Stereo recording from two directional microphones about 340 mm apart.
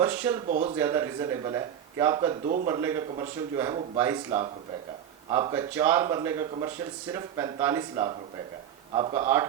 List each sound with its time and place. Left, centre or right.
0.0 s speech: centre
0.4 s speech: centre
0.8 s speech: centre